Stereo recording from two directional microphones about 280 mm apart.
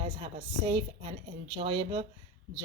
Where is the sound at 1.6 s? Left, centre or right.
Centre.